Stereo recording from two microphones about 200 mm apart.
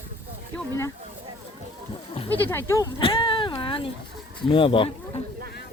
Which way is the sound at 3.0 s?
25° left (ahead or behind).